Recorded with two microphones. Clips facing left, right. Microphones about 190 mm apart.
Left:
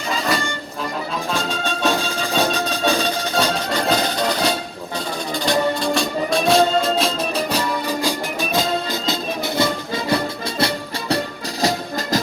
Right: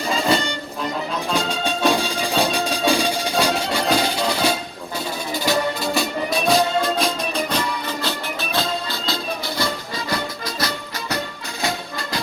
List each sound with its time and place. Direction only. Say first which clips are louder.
0.1 s music: right 2 dB; 30° right (ahead or behind)
1.3 s music: right 2 dB; 15° right (ahead or behind); by 10.7 s 25° left (ahead or behind)
11.6 s music: left 5 dB; 40° left (ahead or behind)